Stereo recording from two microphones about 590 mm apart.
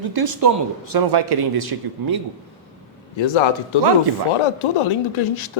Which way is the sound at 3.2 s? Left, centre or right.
Left.